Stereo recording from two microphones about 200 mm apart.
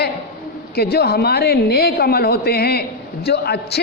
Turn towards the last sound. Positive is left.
turn(degrees=55)  # may be behind; listen again after turning